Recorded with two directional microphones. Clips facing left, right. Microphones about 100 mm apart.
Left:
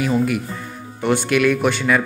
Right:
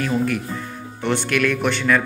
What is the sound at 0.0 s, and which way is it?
Speech, 10° left (ahead or behind).